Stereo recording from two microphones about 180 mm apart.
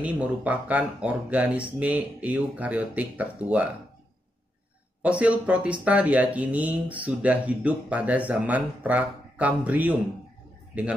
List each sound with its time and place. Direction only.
0.0 s speech: 10° right (ahead or behind)
5.0 s speech: 5° right (ahead or behind)